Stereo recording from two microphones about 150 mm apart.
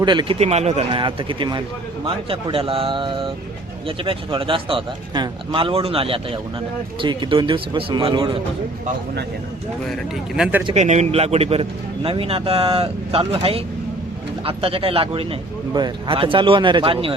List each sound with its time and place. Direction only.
0.0 s speech: 30° right (ahead or behind)
0.3 s speech: 45° right (ahead or behind)
0.9 s speech: 35° right (ahead or behind)
9.9 s speech: 5° right (ahead or behind)
10.8 s speech: 50° right (ahead or behind)